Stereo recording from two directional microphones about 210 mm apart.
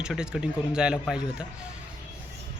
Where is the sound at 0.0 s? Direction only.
5° right (ahead or behind).